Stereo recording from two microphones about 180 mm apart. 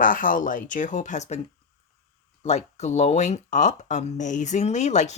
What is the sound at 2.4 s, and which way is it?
Speech, 35° left (ahead or behind).